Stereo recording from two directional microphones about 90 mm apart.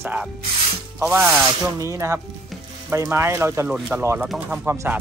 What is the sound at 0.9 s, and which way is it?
Speech, 20° right (ahead or behind).